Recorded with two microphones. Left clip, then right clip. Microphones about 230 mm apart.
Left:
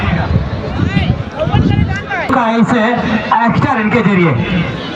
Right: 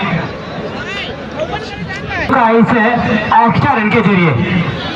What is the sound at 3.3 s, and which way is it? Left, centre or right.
Speech, centre.